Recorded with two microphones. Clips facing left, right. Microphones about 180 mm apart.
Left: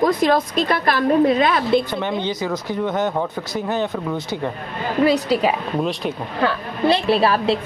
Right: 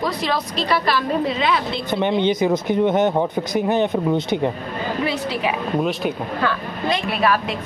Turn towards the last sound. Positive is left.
turn(degrees=30)  # may be behind; listen again after turning